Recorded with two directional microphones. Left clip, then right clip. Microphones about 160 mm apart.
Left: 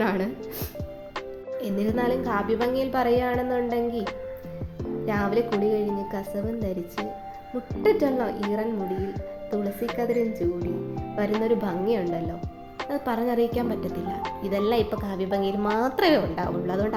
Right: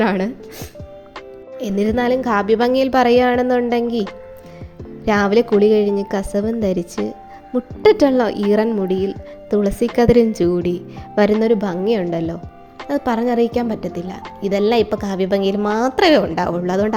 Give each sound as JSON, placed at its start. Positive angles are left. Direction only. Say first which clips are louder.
{"t": 0.0, "sound": "speech", "louder": "right 7 dB", "side_deg": -40}
{"t": 1.5, "sound": "a woman's voice", "louder": "right 8 dB", "side_deg": -35}
{"t": 5.0, "sound": "a woman's voice", "louder": "right 10 dB", "side_deg": -50}
{"t": 11.4, "sound": "a woman's voice", "louder": "right 7 dB", "side_deg": -40}